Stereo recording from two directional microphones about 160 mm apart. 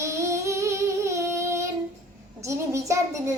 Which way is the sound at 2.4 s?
20° right (ahead or behind).